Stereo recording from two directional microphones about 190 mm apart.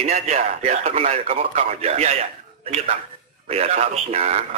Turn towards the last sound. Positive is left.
turn(degrees=-35)  # may be behind; listen again after turning